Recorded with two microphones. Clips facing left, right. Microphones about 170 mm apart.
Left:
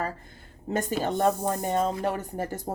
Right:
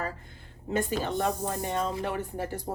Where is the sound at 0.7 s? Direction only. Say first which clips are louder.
Left 1 dB; 45° left (ahead or behind).